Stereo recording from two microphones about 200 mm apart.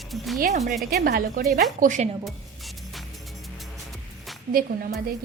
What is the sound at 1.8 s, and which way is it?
Speech, 40° right (ahead or behind).